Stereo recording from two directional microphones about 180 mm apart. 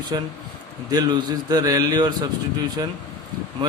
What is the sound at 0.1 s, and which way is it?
A man's voice, 25° right (ahead or behind).